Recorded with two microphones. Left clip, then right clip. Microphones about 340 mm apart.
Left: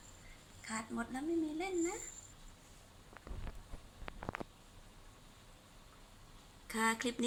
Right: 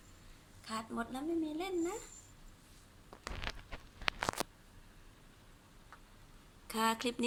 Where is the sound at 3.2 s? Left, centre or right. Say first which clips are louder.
Right 15 dB; right.